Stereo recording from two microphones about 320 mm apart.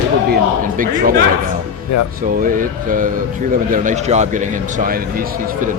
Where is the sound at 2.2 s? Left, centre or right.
Right.